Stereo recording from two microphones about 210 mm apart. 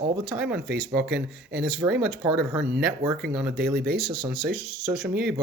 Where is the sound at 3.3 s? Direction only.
Centre (ahead or behind).